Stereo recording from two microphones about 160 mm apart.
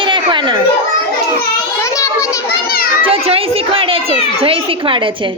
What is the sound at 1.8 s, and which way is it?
Children playing, 20° left (ahead or behind).